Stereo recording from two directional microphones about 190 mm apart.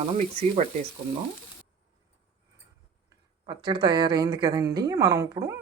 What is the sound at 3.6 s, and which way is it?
Speech, 25° right (ahead or behind).